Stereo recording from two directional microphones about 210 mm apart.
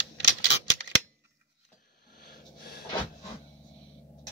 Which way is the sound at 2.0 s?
50° left (ahead or behind).